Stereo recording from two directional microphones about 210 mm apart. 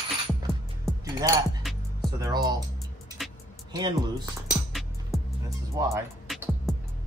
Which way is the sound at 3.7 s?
20° right (ahead or behind).